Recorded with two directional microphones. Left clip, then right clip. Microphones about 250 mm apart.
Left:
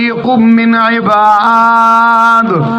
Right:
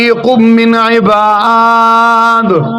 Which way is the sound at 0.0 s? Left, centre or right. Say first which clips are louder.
Right 3 dB; right.